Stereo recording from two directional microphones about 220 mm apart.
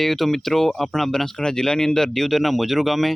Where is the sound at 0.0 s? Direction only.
Centre (ahead or behind).